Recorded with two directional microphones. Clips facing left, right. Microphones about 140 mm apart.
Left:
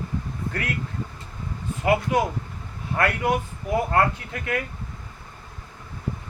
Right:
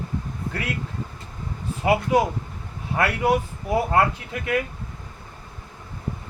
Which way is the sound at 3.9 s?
15° right (ahead or behind).